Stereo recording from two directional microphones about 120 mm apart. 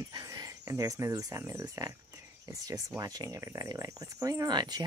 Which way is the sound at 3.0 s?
30° right (ahead or behind).